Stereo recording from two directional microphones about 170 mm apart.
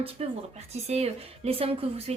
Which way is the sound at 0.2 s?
35° right (ahead or behind).